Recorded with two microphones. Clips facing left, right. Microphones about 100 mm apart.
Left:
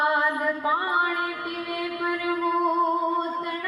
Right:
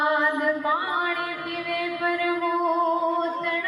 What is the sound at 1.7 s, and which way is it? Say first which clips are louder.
Music: right 3 dB; 40° left (ahead or behind).